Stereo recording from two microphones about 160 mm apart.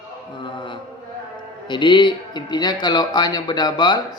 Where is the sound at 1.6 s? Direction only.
30° left (ahead or behind).